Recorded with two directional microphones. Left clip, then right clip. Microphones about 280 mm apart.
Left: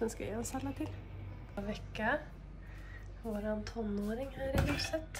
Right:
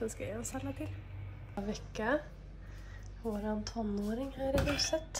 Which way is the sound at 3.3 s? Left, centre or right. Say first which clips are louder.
Left 1 dB; centre.